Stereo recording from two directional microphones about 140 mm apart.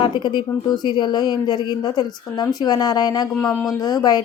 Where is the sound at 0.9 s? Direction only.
30° left (ahead or behind).